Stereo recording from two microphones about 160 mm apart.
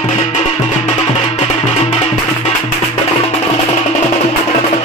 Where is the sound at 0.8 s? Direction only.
30° left (ahead or behind).